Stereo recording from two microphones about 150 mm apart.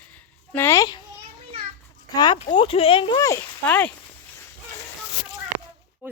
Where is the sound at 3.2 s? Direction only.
20° left (ahead or behind).